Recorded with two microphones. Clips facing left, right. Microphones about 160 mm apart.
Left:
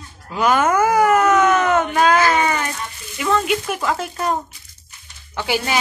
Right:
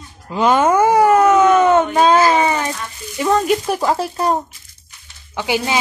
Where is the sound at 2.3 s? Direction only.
30° right (ahead or behind).